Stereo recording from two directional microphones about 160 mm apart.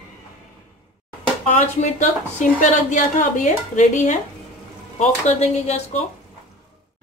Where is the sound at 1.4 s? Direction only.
45° left (ahead or behind).